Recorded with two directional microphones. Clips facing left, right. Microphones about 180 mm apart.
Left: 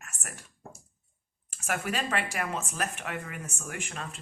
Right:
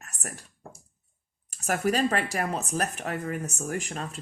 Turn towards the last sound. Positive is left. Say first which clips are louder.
# right 6 dB
turn(degrees=-40)  # may be behind; listen again after turning